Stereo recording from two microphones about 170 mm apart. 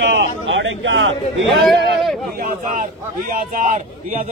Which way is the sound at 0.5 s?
90° right.